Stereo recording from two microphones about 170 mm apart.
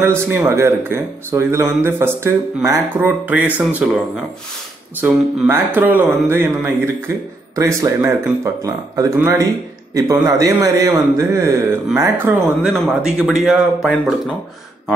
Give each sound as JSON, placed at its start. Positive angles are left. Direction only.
{"t": 0.2, "sound": "speech", "side_deg": -15}
{"t": 5.0, "sound": "speech", "side_deg": -10}